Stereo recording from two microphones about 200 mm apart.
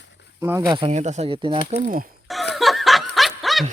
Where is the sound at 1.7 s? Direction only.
40° right (ahead or behind).